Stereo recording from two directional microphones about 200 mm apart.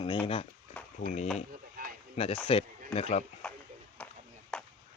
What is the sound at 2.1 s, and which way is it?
Speech, 30° left (ahead or behind).